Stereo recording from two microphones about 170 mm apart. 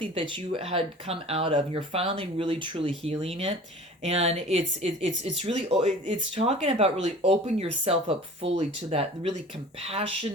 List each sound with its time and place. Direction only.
0.0 s speech: 30° right (ahead or behind)